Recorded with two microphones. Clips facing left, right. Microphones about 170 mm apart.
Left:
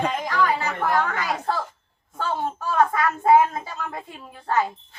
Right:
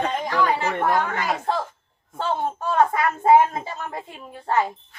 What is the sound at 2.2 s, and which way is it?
A woman's voice, 25° right (ahead or behind).